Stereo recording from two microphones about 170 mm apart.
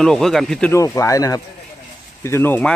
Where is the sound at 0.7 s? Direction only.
20° left (ahead or behind).